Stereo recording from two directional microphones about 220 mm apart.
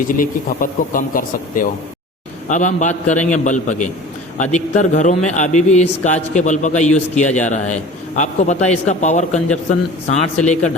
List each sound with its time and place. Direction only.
0.1 s a man's voice: 40° left (ahead or behind)